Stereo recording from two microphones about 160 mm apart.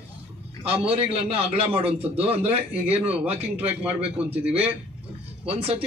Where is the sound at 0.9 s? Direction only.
40° right (ahead or behind).